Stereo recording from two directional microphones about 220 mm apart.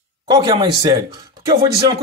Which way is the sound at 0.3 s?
20° right (ahead or behind).